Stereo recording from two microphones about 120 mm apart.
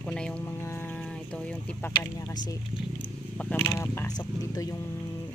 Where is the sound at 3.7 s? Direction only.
25° left (ahead or behind).